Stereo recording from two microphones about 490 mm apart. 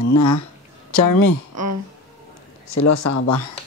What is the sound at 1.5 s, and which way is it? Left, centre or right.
Speech, right.